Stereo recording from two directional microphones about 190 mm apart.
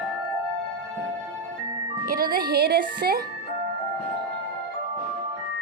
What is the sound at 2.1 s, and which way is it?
Speech, 50° right (ahead or behind).